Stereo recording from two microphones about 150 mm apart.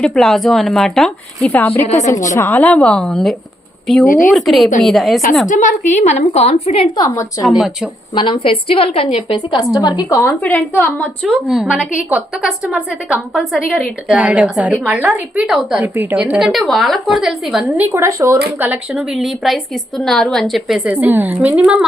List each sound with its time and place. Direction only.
0.0 s a woman's voice: 5° left (ahead or behind)
1.8 s a woman's voice: 50° left (ahead or behind)
2.3 s a woman's voice: 15° left (ahead or behind)
5.5 s a woman's voice: 60° left (ahead or behind)
6.9 s a woman's voice: 25° left (ahead or behind)
7.4 s a woman's voice: centre (ahead or behind)
8.1 s a woman's voice: 35° left (ahead or behind); by 11.1 s 10° left (ahead or behind)
11.4 s a woman's voice: 5° right (ahead or behind)
17.9 s speech: 20° right (ahead or behind)
18.6 s a woman's voice: 5° right (ahead or behind)